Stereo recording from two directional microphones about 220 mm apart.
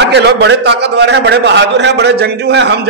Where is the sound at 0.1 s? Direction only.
50° right (ahead or behind).